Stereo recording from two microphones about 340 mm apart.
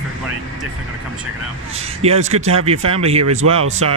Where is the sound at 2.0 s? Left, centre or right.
Centre.